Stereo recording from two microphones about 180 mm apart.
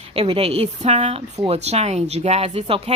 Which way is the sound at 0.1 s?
30° right (ahead or behind).